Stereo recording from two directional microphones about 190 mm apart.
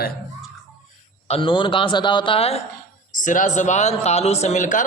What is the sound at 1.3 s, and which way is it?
A man's voice, 25° left (ahead or behind).